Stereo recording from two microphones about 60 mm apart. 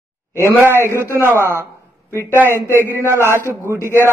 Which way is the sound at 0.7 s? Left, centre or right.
Right.